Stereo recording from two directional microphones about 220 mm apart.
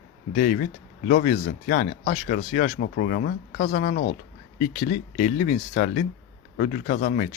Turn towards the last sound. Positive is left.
turn(degrees=40)  # may be behind; listen again after turning